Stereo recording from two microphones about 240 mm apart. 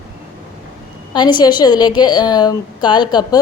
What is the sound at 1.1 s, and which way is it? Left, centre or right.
A woman's voice, centre.